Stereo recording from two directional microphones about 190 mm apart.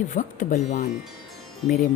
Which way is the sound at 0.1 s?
45° left (ahead or behind).